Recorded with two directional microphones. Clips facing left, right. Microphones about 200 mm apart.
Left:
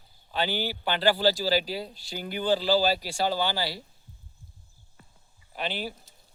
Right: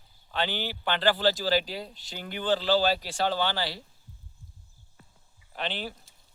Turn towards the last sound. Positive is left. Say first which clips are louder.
# left 1 dB
turn(degrees=10)  # may be behind; listen again after turning